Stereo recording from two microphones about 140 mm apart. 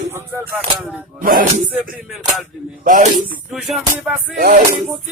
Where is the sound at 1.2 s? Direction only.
80° right.